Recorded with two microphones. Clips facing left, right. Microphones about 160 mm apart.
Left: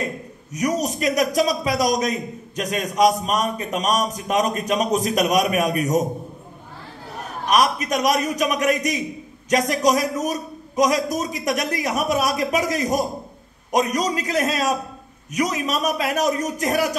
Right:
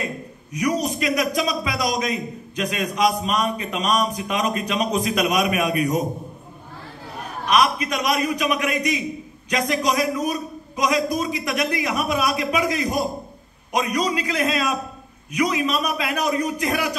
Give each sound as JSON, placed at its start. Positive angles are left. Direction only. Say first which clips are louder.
{"t": 0.5, "sound": "a man's voice", "louder": "even", "side_deg": 45}
{"t": 7.4, "sound": "a man's voice", "louder": "even", "side_deg": 45}